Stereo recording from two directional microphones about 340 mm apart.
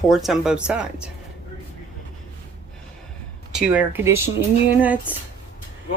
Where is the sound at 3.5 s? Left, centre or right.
Centre.